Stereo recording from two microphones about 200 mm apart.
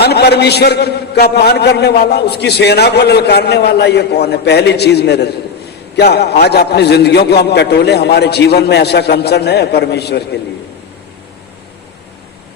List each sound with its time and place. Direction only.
0.0 s a man's voice: 55° left (ahead or behind)